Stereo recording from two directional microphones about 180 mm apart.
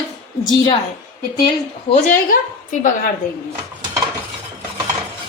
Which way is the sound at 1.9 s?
45° left (ahead or behind).